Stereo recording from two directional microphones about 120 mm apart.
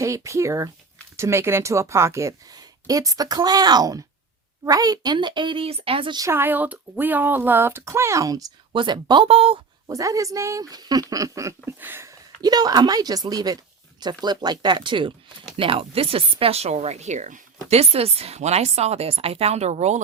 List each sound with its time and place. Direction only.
0.0 s a woman's voice: 25° right (ahead or behind); by 6.1 s 50° right (ahead or behind)
6.1 s speech: 20° right (ahead or behind)
8.7 s speech: 40° right (ahead or behind)
9.9 s a woman's voice: 25° right (ahead or behind)
11.8 s a sound: 20° right (ahead or behind)
12.4 s a woman's voice: 35° right (ahead or behind); by 17.4 s 85° right
17.7 s speech: 60° right (ahead or behind)